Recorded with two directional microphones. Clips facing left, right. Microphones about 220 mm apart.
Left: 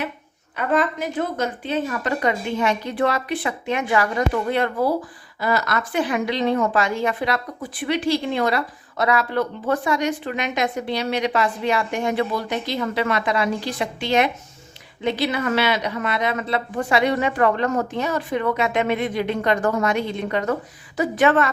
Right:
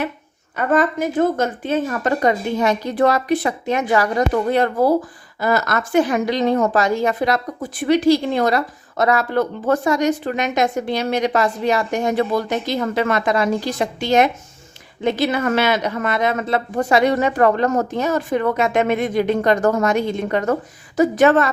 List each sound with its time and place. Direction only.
0.5 s a woman's voice: 45° right (ahead or behind)